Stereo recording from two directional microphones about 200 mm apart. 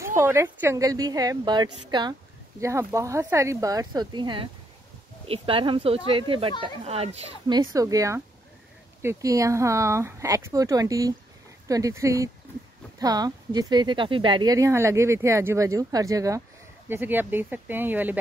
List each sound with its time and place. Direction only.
0.0 s a child's voice: 15° right (ahead or behind)